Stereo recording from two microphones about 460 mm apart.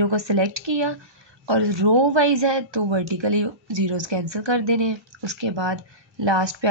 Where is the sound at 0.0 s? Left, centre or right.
Right.